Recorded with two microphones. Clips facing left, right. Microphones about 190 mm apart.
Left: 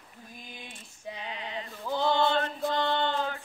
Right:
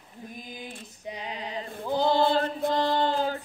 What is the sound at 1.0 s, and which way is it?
Female singing, 20° right (ahead or behind).